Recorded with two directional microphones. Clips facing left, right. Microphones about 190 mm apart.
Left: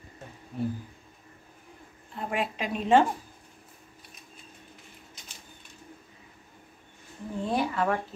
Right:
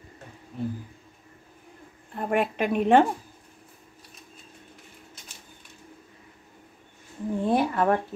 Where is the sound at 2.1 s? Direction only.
55° right (ahead or behind).